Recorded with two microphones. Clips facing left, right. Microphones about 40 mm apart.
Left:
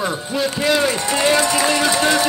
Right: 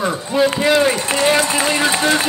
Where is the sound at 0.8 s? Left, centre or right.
Right.